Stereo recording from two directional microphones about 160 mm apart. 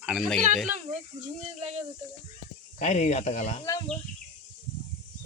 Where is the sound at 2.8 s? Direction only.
45° left (ahead or behind).